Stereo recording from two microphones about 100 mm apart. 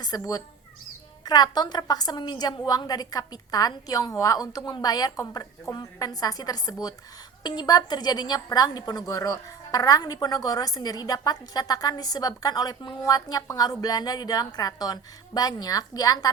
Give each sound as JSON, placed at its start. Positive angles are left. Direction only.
{"t": 0.0, "sound": "a woman's voice", "side_deg": 40}